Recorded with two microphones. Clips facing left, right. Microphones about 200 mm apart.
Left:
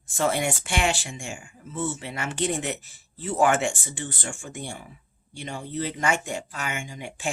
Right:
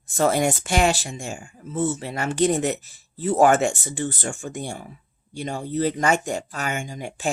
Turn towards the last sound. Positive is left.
turn(degrees=-40)  # may be behind; listen again after turning